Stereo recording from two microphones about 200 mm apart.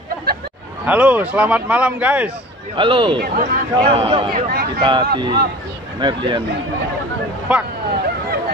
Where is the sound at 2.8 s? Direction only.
25° right (ahead or behind).